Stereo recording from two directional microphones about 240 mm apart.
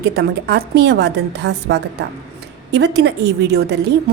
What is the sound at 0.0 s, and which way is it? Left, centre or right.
A woman's voice, right.